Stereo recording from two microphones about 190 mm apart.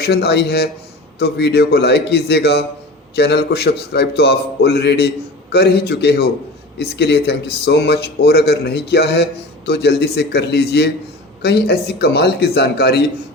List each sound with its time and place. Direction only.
0.0 s speech: 55° left (ahead or behind)